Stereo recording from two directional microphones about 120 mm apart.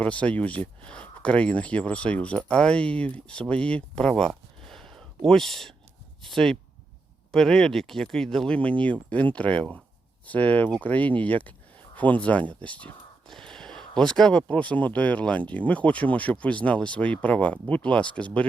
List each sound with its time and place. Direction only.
0.0 s speech: 10° left (ahead or behind)